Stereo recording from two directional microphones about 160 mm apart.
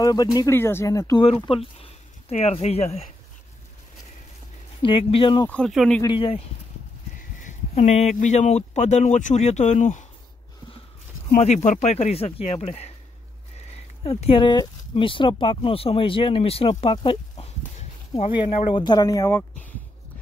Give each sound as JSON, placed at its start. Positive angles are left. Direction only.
{"t": 0.0, "sound": "speech", "side_deg": 25}
{"t": 1.2, "sound": "speech", "side_deg": 35}
{"t": 4.8, "sound": "speech", "side_deg": 35}
{"t": 5.5, "sound": "a man's voice", "side_deg": 5}
{"t": 6.0, "sound": "speech", "side_deg": 35}
{"t": 7.2, "sound": "speech", "side_deg": 50}
{"t": 11.3, "sound": "speech", "side_deg": 45}
{"t": 14.0, "sound": "speech", "side_deg": 35}